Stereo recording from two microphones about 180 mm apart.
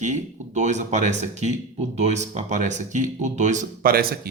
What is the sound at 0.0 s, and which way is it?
A man's voice, 40° right (ahead or behind).